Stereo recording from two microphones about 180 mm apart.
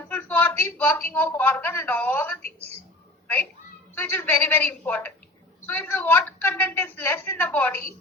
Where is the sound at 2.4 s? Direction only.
35° right (ahead or behind).